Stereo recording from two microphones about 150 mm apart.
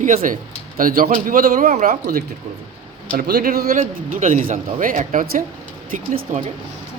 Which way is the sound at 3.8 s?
60° right (ahead or behind).